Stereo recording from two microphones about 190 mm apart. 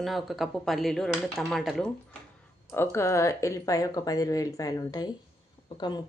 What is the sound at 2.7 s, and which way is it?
Speech, 15° left (ahead or behind).